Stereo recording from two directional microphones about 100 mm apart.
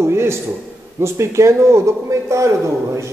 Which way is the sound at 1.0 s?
30° right (ahead or behind).